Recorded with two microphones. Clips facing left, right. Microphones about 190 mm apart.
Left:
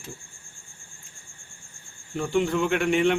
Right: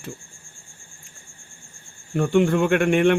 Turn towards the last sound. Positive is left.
turn(degrees=-55)  # may be behind; listen again after turning